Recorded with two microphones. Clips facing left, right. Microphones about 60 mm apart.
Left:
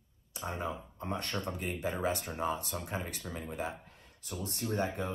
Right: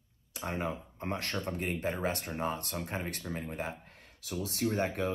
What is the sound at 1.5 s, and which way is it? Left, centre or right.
Speech, right.